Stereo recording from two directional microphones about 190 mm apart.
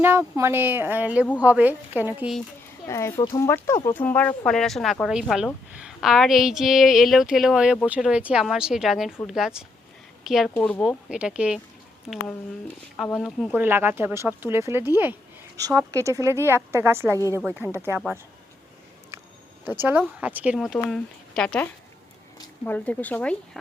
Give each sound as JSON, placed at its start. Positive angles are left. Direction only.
{"t": 0.0, "sound": "speech", "side_deg": -15}
{"t": 2.8, "sound": "a woman's voice", "side_deg": 15}
{"t": 10.8, "sound": "a woman's voice", "side_deg": -5}
{"t": 13.1, "sound": "a woman's voice", "side_deg": 0}
{"t": 17.2, "sound": "speech", "side_deg": 15}
{"t": 17.4, "sound": "speech", "side_deg": -10}
{"t": 19.1, "sound": "a sound", "side_deg": -15}
{"t": 19.8, "sound": "a woman's voice", "side_deg": -10}